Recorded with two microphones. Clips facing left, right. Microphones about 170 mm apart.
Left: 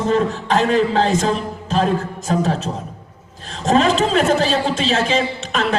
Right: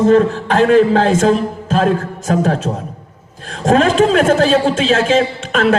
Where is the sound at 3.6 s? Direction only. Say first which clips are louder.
Right 4 dB; 50° right (ahead or behind).